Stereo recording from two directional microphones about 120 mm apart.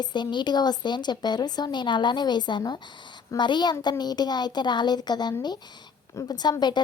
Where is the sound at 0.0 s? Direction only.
40° left (ahead or behind).